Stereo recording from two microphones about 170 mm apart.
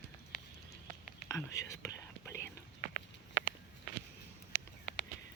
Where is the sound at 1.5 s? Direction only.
20° left (ahead or behind).